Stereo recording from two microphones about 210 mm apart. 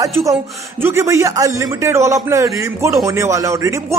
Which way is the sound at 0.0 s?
15° right (ahead or behind).